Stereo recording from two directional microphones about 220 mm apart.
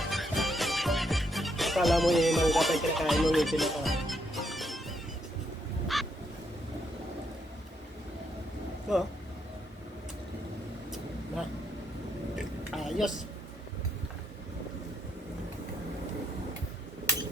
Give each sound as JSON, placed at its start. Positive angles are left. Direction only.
{"t": 0.0, "sound": "music", "side_deg": 0}
{"t": 5.9, "sound": "goose", "side_deg": 0}
{"t": 8.9, "sound": "speech", "side_deg": 0}
{"t": 12.4, "sound": "a sound", "side_deg": 0}